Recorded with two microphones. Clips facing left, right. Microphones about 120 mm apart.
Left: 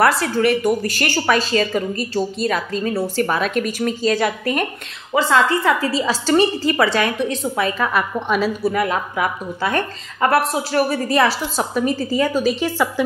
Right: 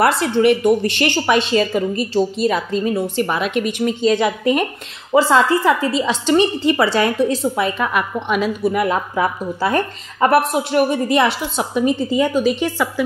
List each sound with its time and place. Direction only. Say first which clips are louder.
0.0 s a woman's voice: right 2 dB; 25° right (ahead or behind)
7.8 s a woman's voice: even; 15° right (ahead or behind)